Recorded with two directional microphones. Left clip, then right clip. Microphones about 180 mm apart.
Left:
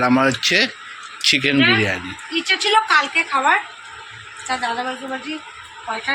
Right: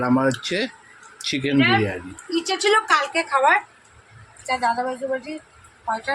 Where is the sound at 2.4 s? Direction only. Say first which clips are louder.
Left 3 dB; 75° right (ahead or behind).